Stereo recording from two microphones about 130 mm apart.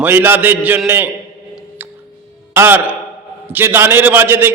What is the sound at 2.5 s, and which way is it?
A man's voice, 15° right (ahead or behind).